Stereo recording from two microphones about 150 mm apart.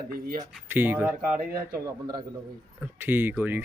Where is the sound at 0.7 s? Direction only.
15° right (ahead or behind).